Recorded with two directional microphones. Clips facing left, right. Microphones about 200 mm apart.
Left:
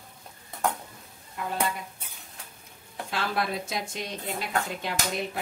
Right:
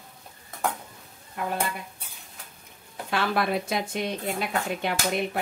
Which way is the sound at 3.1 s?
60° right (ahead or behind).